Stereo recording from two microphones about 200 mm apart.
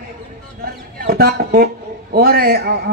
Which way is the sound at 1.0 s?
50° right (ahead or behind).